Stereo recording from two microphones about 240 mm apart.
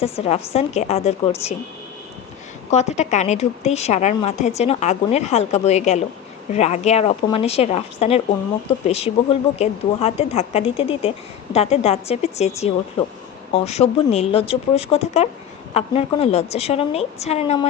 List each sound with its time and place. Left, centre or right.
0.0 s speech: left
2.6 s speech: left